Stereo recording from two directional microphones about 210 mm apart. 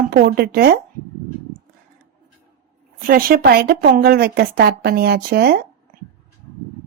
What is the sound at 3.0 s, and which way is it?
Speech, 45° right (ahead or behind).